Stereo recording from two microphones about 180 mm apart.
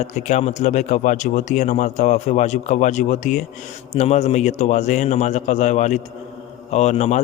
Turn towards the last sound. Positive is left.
turn(degrees=40)  # may be behind; listen again after turning